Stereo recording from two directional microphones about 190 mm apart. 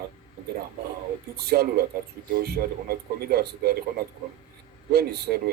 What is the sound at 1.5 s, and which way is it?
Speech, 55° right (ahead or behind).